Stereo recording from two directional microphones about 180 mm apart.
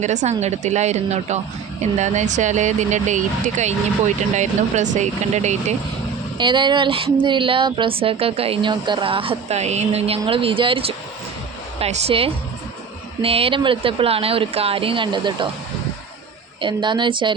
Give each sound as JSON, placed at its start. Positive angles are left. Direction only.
{"t": 0.0, "sound": "speech", "side_deg": -40}
{"t": 6.3, "sound": "speech", "side_deg": -25}
{"t": 16.6, "sound": "speech", "side_deg": -25}